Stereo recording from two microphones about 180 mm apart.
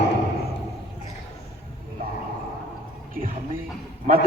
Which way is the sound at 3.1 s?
50° right (ahead or behind).